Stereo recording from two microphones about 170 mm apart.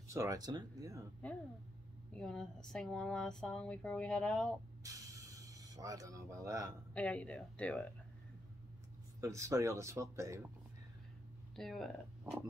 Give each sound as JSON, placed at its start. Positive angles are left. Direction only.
{"t": 0.1, "sound": "speech", "side_deg": -20}
{"t": 2.1, "sound": "speech", "side_deg": 5}
{"t": 4.8, "sound": "a sound", "side_deg": -20}
{"t": 6.9, "sound": "speech", "side_deg": 10}
{"t": 9.2, "sound": "speech", "side_deg": -15}
{"t": 11.5, "sound": "speech", "side_deg": 0}